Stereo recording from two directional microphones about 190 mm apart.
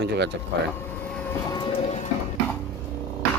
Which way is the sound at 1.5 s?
25° left (ahead or behind).